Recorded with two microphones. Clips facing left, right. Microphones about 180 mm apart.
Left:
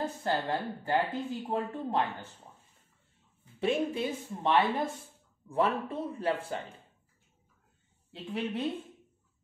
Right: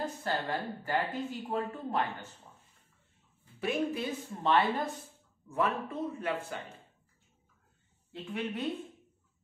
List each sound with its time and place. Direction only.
0.2 s speech: 25° left (ahead or behind)
3.5 s a man's voice: 25° left (ahead or behind)
8.1 s a man's voice: 30° left (ahead or behind)